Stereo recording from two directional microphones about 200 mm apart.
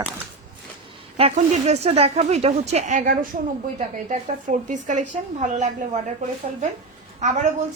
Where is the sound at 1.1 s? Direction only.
30° right (ahead or behind).